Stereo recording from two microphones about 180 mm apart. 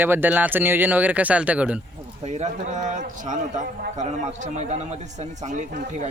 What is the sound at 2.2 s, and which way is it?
A man's voice, 40° right (ahead or behind).